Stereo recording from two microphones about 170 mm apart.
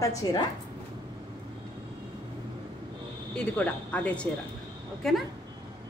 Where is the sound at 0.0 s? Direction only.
20° left (ahead or behind).